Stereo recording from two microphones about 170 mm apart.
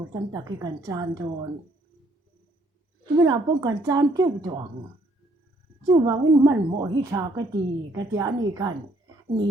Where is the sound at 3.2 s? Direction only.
20° right (ahead or behind).